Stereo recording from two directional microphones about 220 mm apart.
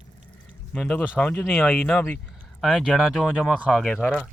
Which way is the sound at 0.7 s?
5° left (ahead or behind).